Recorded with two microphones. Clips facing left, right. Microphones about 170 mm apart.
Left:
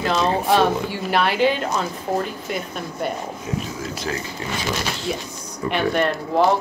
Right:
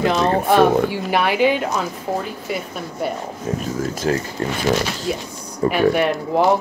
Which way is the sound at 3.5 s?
45° right (ahead or behind).